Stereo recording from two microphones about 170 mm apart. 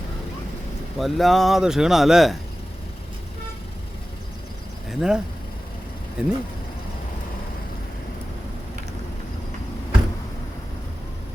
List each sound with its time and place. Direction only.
0.9 s speech: centre (ahead or behind)
4.9 s speech: 5° right (ahead or behind)